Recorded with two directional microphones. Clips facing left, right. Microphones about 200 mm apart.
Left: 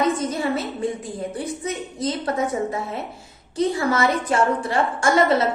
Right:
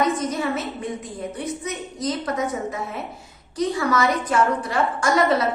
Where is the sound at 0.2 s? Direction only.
30° left (ahead or behind).